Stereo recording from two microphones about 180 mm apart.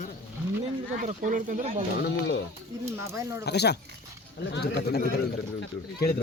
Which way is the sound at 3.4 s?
65° left (ahead or behind).